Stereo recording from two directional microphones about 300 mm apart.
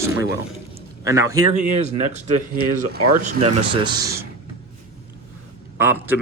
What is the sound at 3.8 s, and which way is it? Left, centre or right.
Speech, centre.